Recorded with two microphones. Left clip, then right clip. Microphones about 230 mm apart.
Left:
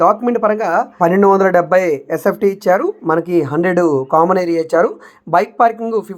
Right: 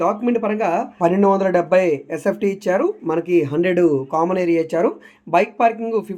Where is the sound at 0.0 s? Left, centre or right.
Centre.